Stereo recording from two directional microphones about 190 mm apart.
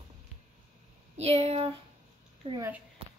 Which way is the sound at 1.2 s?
30° right (ahead or behind).